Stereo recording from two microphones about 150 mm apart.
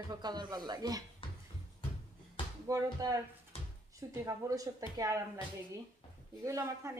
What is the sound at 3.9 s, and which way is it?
Speech, 20° right (ahead or behind).